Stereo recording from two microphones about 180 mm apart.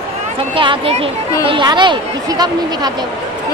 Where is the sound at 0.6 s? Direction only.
30° right (ahead or behind).